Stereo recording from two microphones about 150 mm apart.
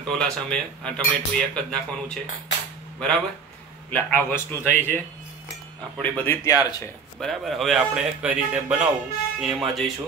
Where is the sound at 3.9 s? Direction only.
10° left (ahead or behind).